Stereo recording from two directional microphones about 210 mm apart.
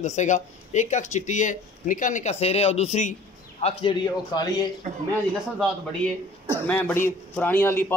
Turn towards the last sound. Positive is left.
turn(degrees=10)  # may be behind; listen again after turning